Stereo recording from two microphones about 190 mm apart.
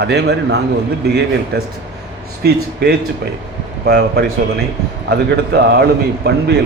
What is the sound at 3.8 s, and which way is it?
A man's voice, 55° right (ahead or behind).